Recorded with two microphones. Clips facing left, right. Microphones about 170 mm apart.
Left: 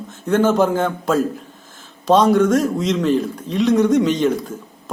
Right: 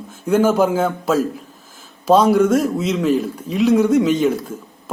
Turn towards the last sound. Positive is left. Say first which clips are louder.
# right 1 dB
turn(degrees=-5)  # may be behind; listen again after turning